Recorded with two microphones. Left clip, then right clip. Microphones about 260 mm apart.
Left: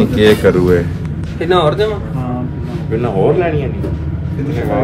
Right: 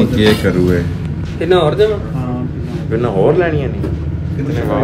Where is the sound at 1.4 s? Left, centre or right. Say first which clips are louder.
Right 1 dB; centre.